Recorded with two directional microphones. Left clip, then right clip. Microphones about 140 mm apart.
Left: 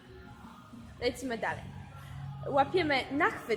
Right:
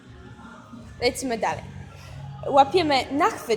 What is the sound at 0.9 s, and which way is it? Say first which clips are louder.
A woman's voice: right 9 dB; 20° right (ahead or behind).